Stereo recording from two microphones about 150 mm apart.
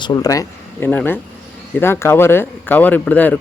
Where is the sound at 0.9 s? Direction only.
10° left (ahead or behind).